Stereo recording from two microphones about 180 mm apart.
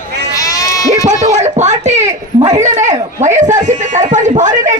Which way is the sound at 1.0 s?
40° right (ahead or behind).